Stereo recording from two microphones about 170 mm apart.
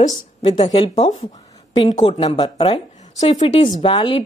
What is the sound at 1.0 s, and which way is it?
Speech, 40° left (ahead or behind).